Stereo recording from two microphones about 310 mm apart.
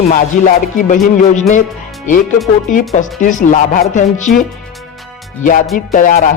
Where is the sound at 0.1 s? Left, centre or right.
Left.